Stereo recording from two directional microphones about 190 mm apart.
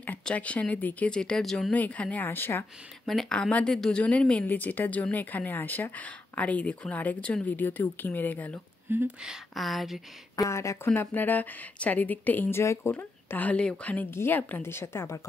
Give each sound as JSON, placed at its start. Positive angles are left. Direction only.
{"t": 0.0, "sound": "speech", "side_deg": 10}
{"t": 8.9, "sound": "speech", "side_deg": -5}
{"t": 10.3, "sound": "speech", "side_deg": 15}